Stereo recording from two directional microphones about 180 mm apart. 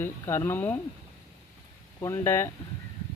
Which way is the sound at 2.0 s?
15° left (ahead or behind).